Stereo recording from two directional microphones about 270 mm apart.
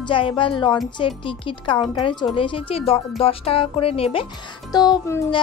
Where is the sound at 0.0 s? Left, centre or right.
Centre.